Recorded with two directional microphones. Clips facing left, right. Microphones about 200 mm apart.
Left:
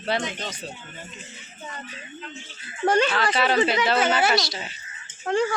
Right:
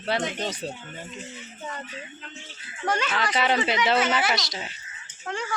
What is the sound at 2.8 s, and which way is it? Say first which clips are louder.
Speech: left 7 dB; 30° left (ahead or behind).